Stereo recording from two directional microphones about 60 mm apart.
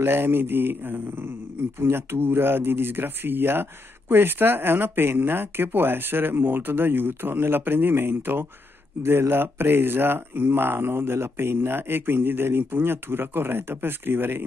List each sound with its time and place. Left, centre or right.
0.0 s speech: right